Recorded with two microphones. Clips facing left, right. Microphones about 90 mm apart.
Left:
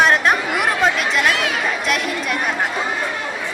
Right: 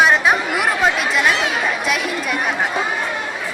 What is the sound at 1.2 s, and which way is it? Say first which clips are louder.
Speech: right 1 dB; 25° right (ahead or behind).